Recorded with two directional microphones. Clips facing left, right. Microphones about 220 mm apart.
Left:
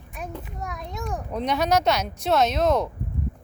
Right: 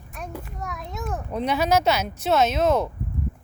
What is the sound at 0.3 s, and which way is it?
A child's voice, centre (ahead or behind).